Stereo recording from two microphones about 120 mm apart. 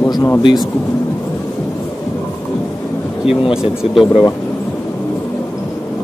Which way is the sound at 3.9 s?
Centre (ahead or behind).